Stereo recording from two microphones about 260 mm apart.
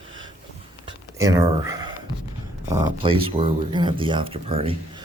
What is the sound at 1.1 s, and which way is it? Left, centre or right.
Speech, centre.